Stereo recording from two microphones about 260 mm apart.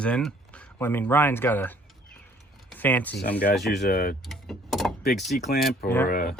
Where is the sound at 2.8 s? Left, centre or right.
Centre.